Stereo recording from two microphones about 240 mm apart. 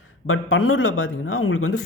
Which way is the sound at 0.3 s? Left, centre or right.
Left.